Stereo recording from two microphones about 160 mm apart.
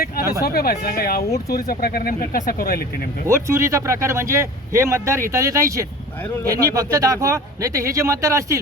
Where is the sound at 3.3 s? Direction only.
20° right (ahead or behind).